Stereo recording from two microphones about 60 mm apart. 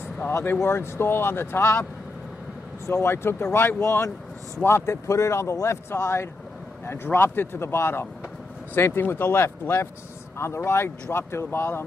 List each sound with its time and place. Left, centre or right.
0.3 s speech: left
2.9 s speech: left